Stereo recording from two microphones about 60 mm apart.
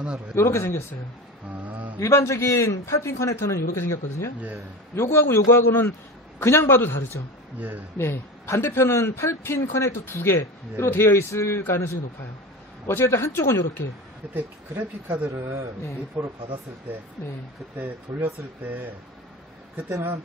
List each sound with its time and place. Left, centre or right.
0.3 s a man's voice: left
1.5 s speech: right
2.0 s a man's voice: left
7.5 s speech: right
8.0 s a man's voice: left
14.3 s speech: right
15.3 s speech: right
17.7 s speech: right